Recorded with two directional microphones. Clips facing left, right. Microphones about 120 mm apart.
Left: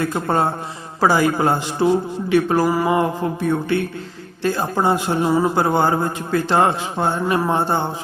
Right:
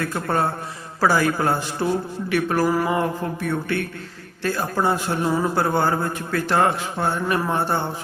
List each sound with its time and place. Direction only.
0.0 s a man's voice: 20° left (ahead or behind)